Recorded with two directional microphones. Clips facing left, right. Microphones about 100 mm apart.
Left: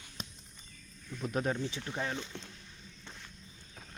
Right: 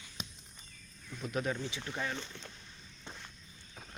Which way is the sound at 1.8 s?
15° left (ahead or behind).